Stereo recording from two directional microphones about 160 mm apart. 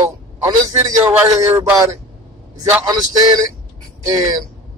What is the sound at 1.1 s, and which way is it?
Speech, 20° right (ahead or behind).